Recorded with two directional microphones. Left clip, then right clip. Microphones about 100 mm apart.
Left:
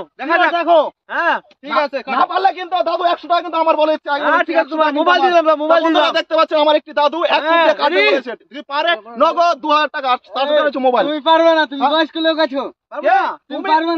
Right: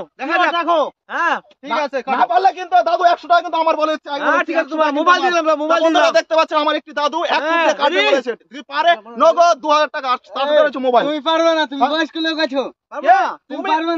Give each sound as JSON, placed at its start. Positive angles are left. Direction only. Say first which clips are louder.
{"t": 0.2, "sound": "speech", "louder": "left 2 dB", "side_deg": -25}